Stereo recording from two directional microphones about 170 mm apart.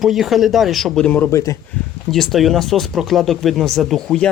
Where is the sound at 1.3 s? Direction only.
20° left (ahead or behind).